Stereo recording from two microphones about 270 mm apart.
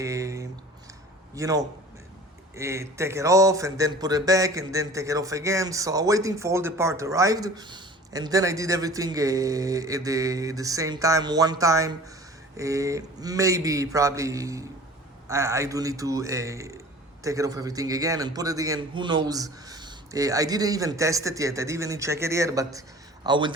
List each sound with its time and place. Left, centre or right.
0.0 s speech: centre